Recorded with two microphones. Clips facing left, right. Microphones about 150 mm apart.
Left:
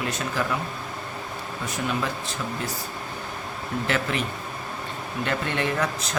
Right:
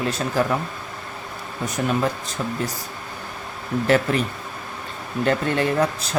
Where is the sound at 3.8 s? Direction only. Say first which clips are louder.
Right 8 dB; 40° right (ahead or behind).